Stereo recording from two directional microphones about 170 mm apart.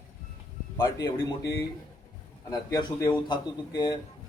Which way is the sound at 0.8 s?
20° left (ahead or behind).